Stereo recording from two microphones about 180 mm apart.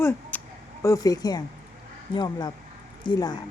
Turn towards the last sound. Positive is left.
turn(degrees=25)  # may be behind; listen again after turning